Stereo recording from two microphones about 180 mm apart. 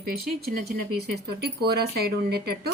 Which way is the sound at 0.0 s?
55° right (ahead or behind).